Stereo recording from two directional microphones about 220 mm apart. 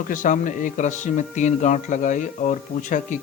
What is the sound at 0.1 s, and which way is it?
Speech, 35° left (ahead or behind).